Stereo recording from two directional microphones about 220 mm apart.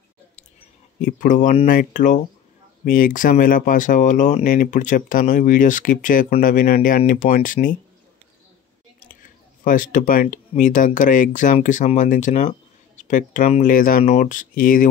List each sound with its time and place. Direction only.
1.0 s speech: 35° left (ahead or behind)
9.2 s speech: 40° left (ahead or behind)